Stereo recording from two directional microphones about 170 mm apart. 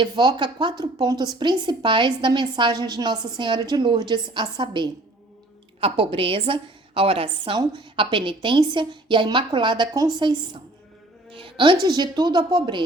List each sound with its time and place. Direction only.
0.0 s a woman's voice: 25° right (ahead or behind)